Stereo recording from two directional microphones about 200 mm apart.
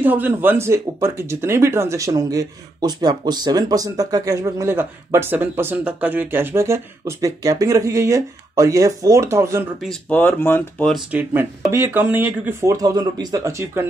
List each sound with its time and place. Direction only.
0.0 s speech: 10° right (ahead or behind)
9.8 s speech: 5° left (ahead or behind)
11.1 s speech: 5° right (ahead or behind)